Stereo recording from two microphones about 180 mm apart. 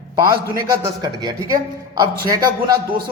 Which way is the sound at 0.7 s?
25° right (ahead or behind).